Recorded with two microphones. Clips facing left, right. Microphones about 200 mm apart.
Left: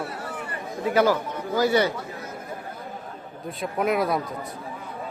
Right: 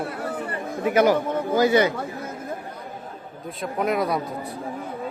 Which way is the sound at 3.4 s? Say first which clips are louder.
Even; centre (ahead or behind).